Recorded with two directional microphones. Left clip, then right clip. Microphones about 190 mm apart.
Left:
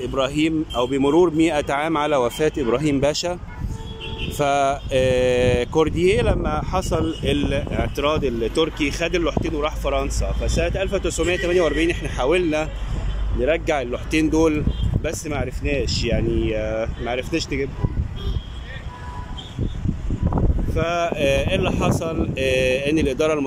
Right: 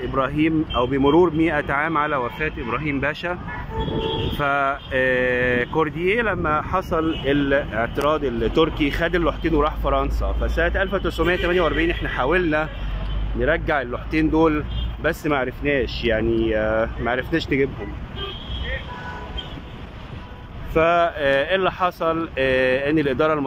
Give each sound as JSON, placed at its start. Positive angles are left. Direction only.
{"t": 0.1, "sound": "speech", "side_deg": 15}
{"t": 4.4, "sound": "speech", "side_deg": 25}
{"t": 20.7, "sound": "speech", "side_deg": 5}